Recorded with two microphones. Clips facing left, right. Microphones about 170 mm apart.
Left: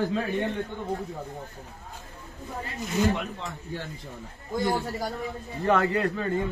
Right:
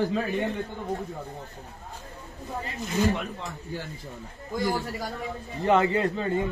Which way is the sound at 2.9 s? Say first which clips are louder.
Even; centre (ahead or behind).